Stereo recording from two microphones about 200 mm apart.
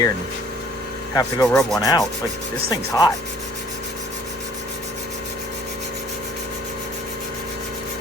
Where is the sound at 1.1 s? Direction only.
20° left (ahead or behind).